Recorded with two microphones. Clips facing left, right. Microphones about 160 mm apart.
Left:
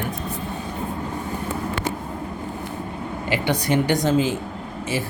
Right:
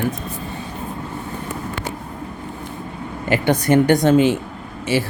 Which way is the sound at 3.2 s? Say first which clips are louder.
Right 6 dB; 50° right (ahead or behind).